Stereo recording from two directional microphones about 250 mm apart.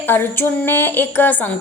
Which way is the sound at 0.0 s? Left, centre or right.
Centre.